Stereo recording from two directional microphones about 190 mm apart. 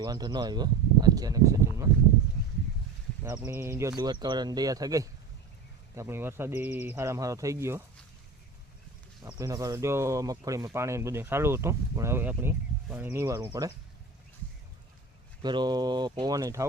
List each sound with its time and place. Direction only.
0.0 s speech: 20° right (ahead or behind)
3.2 s speech: 15° right (ahead or behind)
9.2 s speech: 15° right (ahead or behind)
15.4 s speech: 25° right (ahead or behind)